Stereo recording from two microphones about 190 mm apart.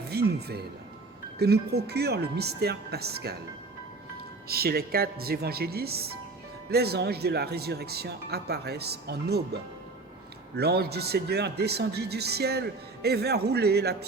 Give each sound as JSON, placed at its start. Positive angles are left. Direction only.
{"t": 0.1, "sound": "music", "side_deg": -60}
{"t": 1.4, "sound": "speech", "side_deg": -60}
{"t": 4.4, "sound": "speech", "side_deg": -55}
{"t": 10.6, "sound": "speech", "side_deg": -60}